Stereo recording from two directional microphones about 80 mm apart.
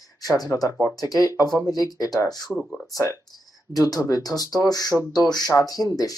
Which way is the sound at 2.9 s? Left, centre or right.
Left.